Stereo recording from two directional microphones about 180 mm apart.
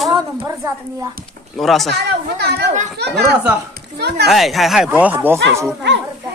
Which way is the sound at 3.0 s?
65° right (ahead or behind).